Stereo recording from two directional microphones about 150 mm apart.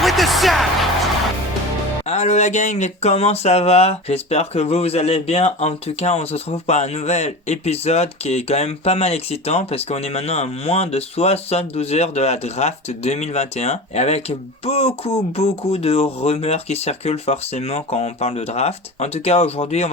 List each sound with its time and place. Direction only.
0.0 s music: centre (ahead or behind)
2.0 s speech: 45° left (ahead or behind)